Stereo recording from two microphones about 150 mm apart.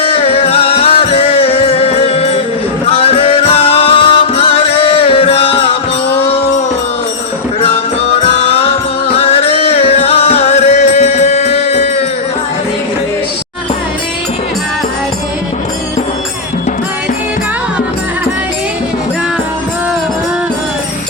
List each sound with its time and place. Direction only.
0.0 s music: 40° left (ahead or behind)
8.1 s music: 40° left (ahead or behind)